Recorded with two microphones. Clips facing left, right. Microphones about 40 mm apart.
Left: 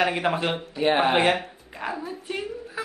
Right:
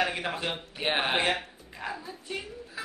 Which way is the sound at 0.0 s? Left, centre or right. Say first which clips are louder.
Left 6 dB; left.